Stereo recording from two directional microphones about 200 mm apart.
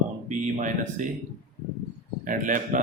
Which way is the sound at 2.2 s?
40° right (ahead or behind).